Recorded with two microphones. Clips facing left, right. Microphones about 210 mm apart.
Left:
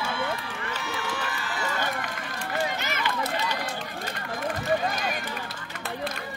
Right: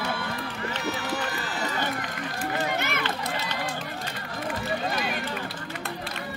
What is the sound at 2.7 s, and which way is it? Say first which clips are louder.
Run: right 3 dB; 55° right (ahead or behind).